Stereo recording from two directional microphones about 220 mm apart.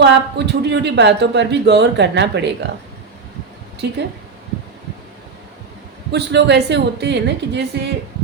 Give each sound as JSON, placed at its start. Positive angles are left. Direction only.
{"t": 0.0, "sound": "speech", "side_deg": -50}
{"t": 3.8, "sound": "speech", "side_deg": -50}
{"t": 6.1, "sound": "speech", "side_deg": -50}